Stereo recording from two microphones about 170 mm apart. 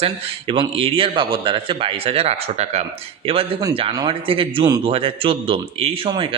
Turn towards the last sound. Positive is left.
turn(degrees=-30)  # may be behind; listen again after turning